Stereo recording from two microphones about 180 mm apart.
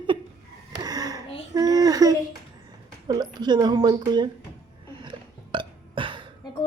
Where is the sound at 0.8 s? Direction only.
20° right (ahead or behind).